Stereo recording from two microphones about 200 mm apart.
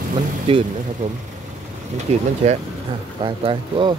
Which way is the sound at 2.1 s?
30° right (ahead or behind).